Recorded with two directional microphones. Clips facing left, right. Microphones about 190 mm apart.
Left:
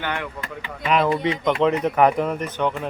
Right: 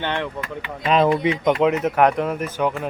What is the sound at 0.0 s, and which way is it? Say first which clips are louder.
Speech: right 3 dB; 30° right (ahead or behind).